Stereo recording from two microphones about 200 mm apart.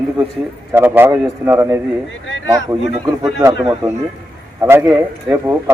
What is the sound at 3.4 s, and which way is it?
Speech, 15° right (ahead or behind).